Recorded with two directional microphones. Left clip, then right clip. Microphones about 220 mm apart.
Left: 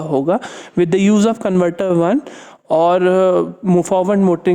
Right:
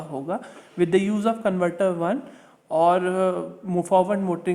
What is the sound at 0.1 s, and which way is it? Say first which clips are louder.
A man's voice: left 14 dB; 45° left (ahead or behind).